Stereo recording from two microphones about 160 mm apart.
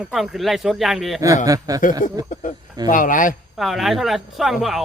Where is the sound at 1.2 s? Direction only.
20° right (ahead or behind).